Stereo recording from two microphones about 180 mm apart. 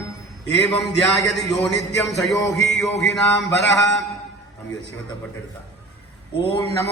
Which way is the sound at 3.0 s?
75° left (ahead or behind).